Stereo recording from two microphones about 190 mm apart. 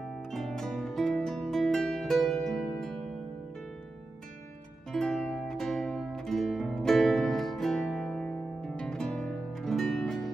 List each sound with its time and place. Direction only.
0.3 s music: centre (ahead or behind)
4.9 s music: centre (ahead or behind)